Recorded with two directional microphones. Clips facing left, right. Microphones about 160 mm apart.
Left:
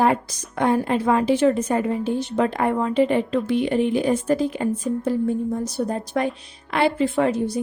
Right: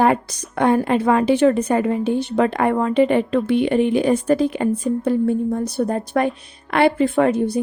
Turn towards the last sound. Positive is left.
turn(degrees=-60)  # may be behind; listen again after turning